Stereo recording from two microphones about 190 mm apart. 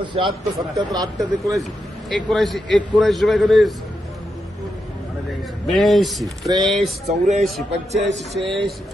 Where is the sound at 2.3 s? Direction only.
Centre (ahead or behind).